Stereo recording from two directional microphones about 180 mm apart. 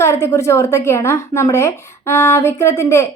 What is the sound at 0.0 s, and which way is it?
A woman's voice, 15° left (ahead or behind).